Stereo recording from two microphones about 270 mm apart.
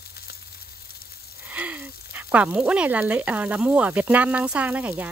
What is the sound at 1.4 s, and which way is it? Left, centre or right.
Speech, centre.